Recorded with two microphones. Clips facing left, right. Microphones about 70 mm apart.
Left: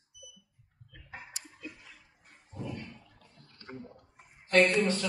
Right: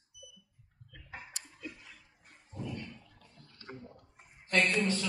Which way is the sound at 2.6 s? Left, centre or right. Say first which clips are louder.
Left 1 dB; left.